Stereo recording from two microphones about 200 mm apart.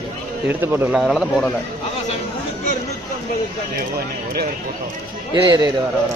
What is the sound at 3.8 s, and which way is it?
Speech, 50° right (ahead or behind).